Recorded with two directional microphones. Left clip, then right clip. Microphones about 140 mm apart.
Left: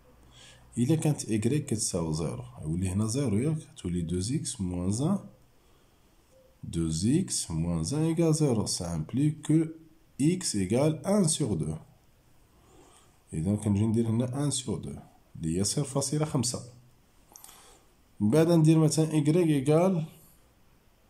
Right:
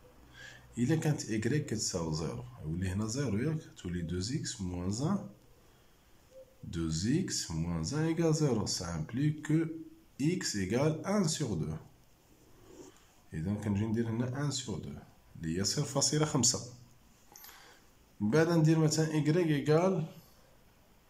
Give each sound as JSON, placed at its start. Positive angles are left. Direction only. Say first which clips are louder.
{"t": 0.3, "sound": "speech", "louder": "right 1 dB", "side_deg": 20}
{"t": 6.7, "sound": "speech", "louder": "left 5 dB", "side_deg": 20}
{"t": 13.3, "sound": "speech", "louder": "left 6 dB", "side_deg": 25}
{"t": 17.3, "sound": "a sound", "louder": "left 1 dB", "side_deg": 20}
{"t": 18.3, "sound": "speech", "louder": "left 5 dB", "side_deg": 20}